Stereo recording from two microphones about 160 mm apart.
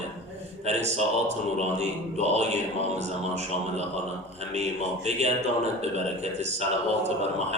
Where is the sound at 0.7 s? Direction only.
45° right (ahead or behind).